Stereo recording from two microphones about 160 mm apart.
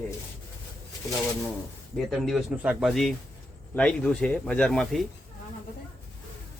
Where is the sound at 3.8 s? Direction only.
5° left (ahead or behind).